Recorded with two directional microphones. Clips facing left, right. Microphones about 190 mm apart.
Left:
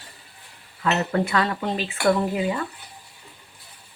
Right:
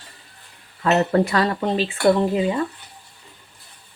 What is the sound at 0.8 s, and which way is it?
Speech, 40° right (ahead or behind).